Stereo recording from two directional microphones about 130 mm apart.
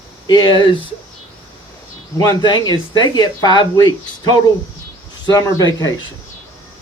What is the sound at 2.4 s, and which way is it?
Speech, 35° left (ahead or behind).